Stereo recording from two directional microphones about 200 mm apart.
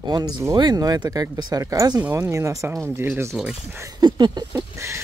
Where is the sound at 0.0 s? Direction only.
20° right (ahead or behind).